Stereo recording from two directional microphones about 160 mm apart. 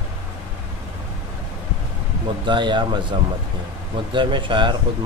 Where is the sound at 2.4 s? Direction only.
30° right (ahead or behind).